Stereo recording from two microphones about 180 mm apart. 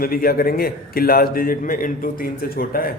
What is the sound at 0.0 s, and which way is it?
A man's voice, 55° left (ahead or behind).